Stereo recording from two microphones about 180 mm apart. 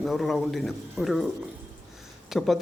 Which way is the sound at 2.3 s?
Centre (ahead or behind).